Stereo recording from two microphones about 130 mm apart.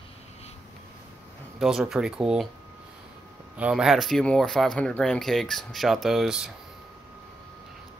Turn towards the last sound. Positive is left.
turn(degrees=-5)  # may be behind; listen again after turning